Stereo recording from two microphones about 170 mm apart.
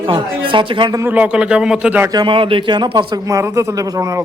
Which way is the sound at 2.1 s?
25° right (ahead or behind).